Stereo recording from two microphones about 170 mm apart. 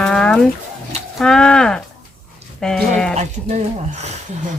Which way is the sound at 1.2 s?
5° left (ahead or behind).